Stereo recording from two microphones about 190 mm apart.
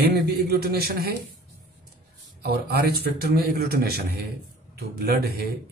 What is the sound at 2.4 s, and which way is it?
A man's voice, 60° right (ahead or behind).